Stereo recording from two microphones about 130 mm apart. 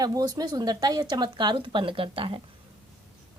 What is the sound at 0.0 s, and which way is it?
A woman's voice, 30° right (ahead or behind).